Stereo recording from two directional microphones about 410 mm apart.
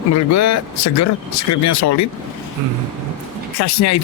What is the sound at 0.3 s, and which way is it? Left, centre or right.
Speech, left.